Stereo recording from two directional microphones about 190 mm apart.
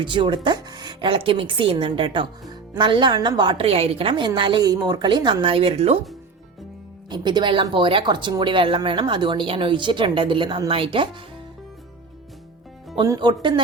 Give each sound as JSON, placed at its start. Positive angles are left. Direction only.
{"t": 0.0, "sound": "speech", "side_deg": -25}
{"t": 7.1, "sound": "speech", "side_deg": -25}
{"t": 13.0, "sound": "speech", "side_deg": -25}